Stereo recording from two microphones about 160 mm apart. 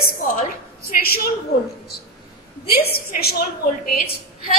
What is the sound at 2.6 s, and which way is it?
A woman's voice, 75° left (ahead or behind).